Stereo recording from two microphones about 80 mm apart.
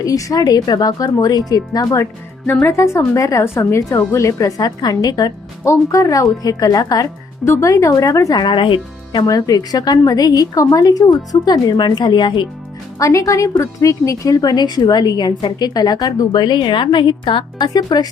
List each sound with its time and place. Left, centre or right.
0.0 s a woman's voice: left
2.5 s a woman's voice: left
5.6 s a woman's voice: left
8.4 s speech: left
9.2 s a woman's voice: left
13.0 s a woman's voice: left
17.9 s speech: left